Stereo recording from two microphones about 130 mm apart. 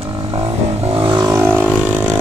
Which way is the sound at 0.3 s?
50° right (ahead or behind).